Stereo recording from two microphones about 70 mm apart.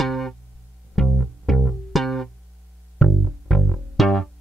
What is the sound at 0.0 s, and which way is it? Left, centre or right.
Music, centre.